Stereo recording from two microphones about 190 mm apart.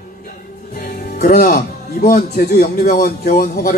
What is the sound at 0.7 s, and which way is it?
A woman's voice, 45° left (ahead or behind).